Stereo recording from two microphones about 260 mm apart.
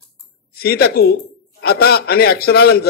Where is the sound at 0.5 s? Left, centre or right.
Left.